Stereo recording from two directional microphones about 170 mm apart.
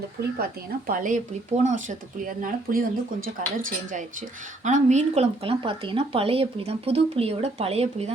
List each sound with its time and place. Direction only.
0.9 s speech: 55° right (ahead or behind)
4.6 s speech: 45° right (ahead or behind)